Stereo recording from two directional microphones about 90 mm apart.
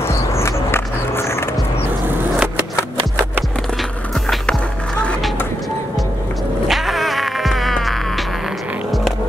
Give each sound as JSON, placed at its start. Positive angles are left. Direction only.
{"t": 0.0, "sound": "skateboard", "side_deg": 30}
{"t": 2.3, "sound": "skateboard", "side_deg": -10}
{"t": 4.1, "sound": "skateboard", "side_deg": 5}
{"t": 6.7, "sound": "music", "side_deg": 0}